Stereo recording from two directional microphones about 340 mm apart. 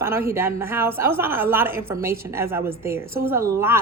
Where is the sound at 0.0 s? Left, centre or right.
Centre.